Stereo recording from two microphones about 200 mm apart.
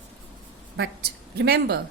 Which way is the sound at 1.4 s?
55° right (ahead or behind).